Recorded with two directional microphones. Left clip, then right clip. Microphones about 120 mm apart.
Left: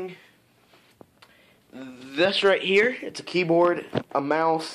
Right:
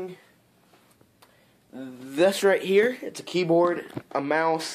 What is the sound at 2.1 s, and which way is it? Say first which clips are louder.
Speech: even; 50° right (ahead or behind).